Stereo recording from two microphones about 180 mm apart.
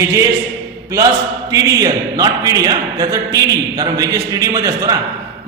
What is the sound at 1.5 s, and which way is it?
A man's voice, 20° right (ahead or behind).